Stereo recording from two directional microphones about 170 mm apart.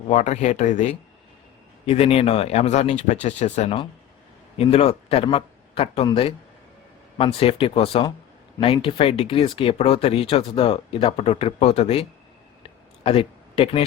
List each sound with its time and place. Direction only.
0.1 s a man's voice: 40° left (ahead or behind)